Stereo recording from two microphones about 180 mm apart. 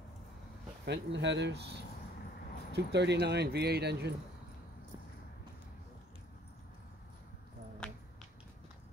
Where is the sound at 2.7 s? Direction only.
70° right (ahead or behind).